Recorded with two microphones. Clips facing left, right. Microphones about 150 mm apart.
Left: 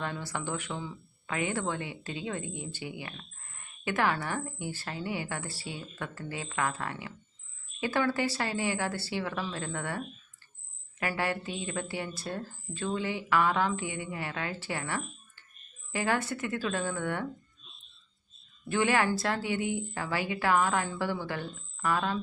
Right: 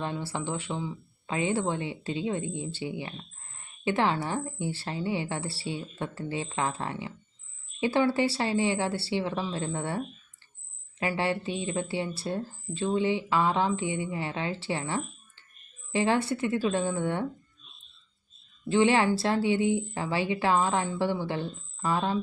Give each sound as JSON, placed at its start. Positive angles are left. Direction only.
{"t": 0.0, "sound": "a woman's voice", "side_deg": -25}
{"t": 11.0, "sound": "a woman's voice", "side_deg": -25}
{"t": 18.7, "sound": "a woman's voice", "side_deg": -25}